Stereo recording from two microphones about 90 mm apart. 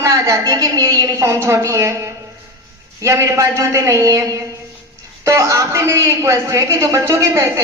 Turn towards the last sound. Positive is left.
turn(degrees=-35)  # may be behind; listen again after turning